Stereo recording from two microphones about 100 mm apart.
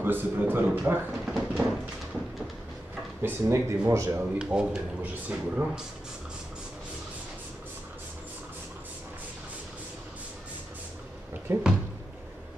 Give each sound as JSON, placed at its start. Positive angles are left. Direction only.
{"t": 0.0, "sound": "a man's voice", "side_deg": -20}
{"t": 1.2, "sound": "a sound", "side_deg": -5}
{"t": 3.2, "sound": "speech", "side_deg": -25}
{"t": 4.4, "sound": "speech", "side_deg": -10}
{"t": 11.4, "sound": "speech", "side_deg": -15}